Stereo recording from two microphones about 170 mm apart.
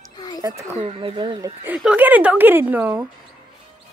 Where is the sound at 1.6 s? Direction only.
10° right (ahead or behind).